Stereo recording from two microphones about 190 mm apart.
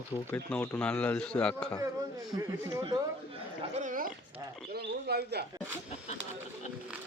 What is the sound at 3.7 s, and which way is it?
Speech, 45° right (ahead or behind).